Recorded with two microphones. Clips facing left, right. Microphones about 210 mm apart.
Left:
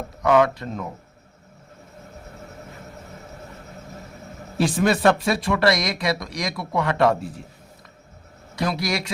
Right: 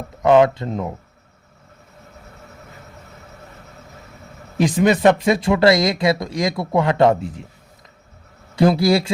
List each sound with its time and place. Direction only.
0.2 s speech: 25° right (ahead or behind)
4.5 s speech: 20° right (ahead or behind)
8.5 s speech: 30° right (ahead or behind)